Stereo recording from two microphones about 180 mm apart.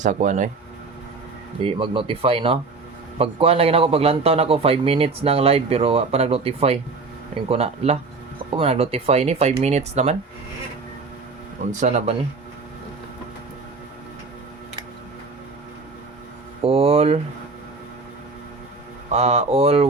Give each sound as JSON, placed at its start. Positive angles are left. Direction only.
{"t": 0.0, "sound": "speech", "side_deg": -45}
{"t": 1.6, "sound": "a man's voice", "side_deg": -30}
{"t": 11.7, "sound": "a man's voice", "side_deg": -40}
{"t": 16.6, "sound": "a sound", "side_deg": -35}
{"t": 19.1, "sound": "a man's voice", "side_deg": -35}